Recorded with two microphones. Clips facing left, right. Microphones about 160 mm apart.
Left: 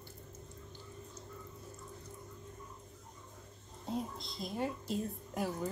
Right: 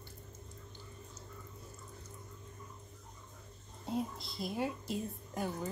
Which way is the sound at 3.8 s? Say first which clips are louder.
Right 2 dB; 5° right (ahead or behind).